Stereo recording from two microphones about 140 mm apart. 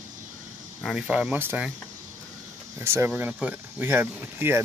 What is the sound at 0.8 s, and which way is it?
Speech, 5° right (ahead or behind).